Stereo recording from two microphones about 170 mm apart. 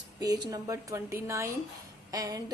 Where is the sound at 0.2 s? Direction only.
20° right (ahead or behind).